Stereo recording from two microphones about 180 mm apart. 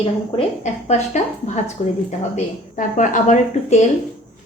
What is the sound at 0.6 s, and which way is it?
Speech, 40° left (ahead or behind).